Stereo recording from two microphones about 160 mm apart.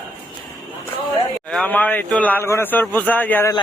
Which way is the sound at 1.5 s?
10° left (ahead or behind).